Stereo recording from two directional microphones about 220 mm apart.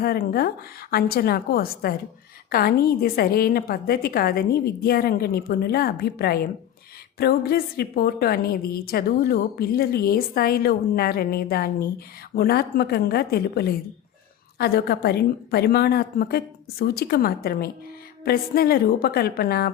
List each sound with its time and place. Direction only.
0.0 s a woman's voice: 40° left (ahead or behind)